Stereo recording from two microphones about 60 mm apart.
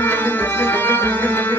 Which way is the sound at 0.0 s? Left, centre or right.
Left.